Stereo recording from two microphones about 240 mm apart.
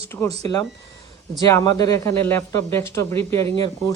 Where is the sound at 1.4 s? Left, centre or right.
Centre.